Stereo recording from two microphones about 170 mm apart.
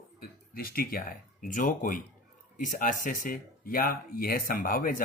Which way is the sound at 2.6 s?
50° left (ahead or behind).